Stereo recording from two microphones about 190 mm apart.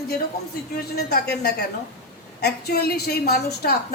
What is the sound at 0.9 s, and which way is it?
A woman's voice, 55° left (ahead or behind).